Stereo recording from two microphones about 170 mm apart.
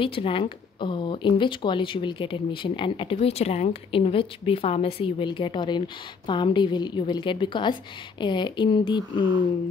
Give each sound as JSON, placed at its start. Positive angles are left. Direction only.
{"t": 0.0, "sound": "speech", "side_deg": 30}